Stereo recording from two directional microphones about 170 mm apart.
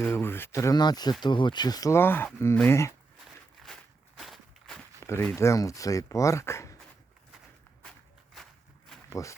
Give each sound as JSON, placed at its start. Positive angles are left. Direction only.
{"t": 0.0, "sound": "speech", "side_deg": 15}
{"t": 3.6, "sound": "walk", "side_deg": 0}
{"t": 4.9, "sound": "speech", "side_deg": 15}
{"t": 7.8, "sound": "a sound", "side_deg": 5}
{"t": 9.0, "sound": "walk", "side_deg": 20}